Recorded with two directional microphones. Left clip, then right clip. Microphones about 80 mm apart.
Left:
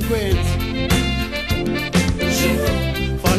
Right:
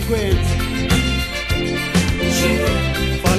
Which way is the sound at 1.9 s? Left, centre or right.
Right.